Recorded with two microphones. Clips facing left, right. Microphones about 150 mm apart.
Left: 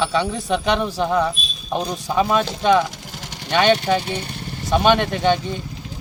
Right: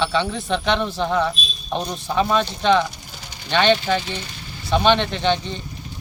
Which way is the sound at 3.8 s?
60° left (ahead or behind).